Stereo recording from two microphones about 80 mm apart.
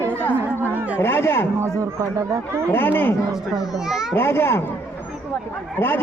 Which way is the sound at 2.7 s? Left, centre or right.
Left.